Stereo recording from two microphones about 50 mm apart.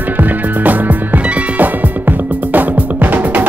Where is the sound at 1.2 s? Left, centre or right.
Right.